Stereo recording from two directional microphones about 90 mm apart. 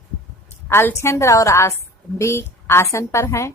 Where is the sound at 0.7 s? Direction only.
25° left (ahead or behind).